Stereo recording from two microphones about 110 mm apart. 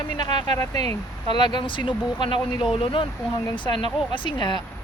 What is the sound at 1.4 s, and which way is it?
Speech, 45° left (ahead or behind).